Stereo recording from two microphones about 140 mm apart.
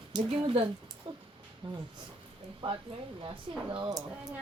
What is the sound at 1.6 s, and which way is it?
Speech, 35° right (ahead or behind).